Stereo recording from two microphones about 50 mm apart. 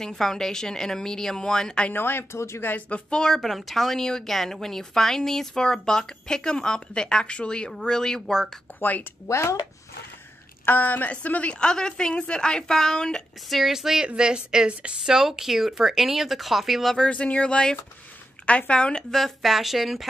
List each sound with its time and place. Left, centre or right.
0.0 s a woman's voice: centre
2.0 s speech: left
2.3 s speech: left
2.9 s a woman's voice: centre
8.7 s a woman's voice: left
9.3 s speech: left
10.6 s a woman's voice: left
11.6 s a woman's voice: centre
13.5 s a woman's voice: centre; by 15.0 s right
15.0 s speech: centre
17.0 s speech: left
19.1 s speech: centre